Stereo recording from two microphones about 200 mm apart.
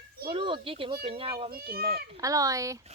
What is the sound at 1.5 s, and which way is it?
Speech, 50° right (ahead or behind).